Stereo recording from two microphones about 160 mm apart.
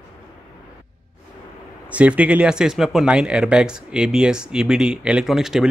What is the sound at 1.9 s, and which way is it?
Speech, 10° right (ahead or behind).